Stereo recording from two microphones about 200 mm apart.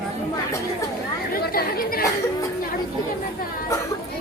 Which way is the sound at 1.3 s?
50° left (ahead or behind).